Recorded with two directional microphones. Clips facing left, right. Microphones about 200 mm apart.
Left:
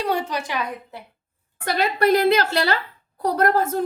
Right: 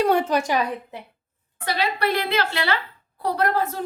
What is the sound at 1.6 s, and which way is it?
A woman's voice, 50° left (ahead or behind).